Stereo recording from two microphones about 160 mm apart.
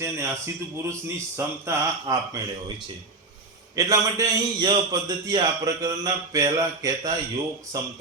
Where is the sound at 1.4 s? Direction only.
15° right (ahead or behind).